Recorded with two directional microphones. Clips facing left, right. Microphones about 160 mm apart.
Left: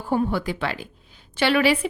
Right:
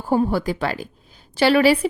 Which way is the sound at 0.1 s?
35° right (ahead or behind).